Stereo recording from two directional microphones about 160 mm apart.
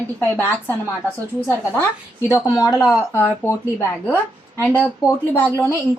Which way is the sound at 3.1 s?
15° left (ahead or behind).